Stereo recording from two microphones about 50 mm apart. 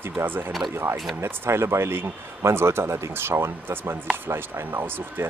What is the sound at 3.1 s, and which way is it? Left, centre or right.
Speech, right.